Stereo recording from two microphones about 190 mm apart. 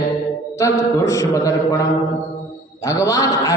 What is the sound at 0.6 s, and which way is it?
Speech, 15° left (ahead or behind).